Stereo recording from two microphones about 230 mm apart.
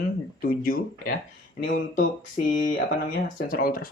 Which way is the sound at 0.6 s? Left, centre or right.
Left.